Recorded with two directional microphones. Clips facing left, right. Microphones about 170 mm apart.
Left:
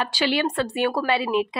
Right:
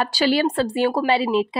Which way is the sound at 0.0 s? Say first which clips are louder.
Right 4 dB; 40° right (ahead or behind).